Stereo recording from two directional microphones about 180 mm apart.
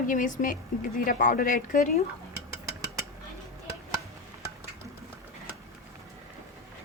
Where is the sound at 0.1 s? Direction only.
45° left (ahead or behind).